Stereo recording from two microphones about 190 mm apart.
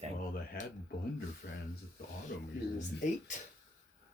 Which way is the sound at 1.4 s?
60° left (ahead or behind).